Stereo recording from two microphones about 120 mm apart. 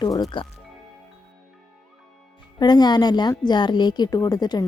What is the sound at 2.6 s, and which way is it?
A woman's voice, 35° left (ahead or behind).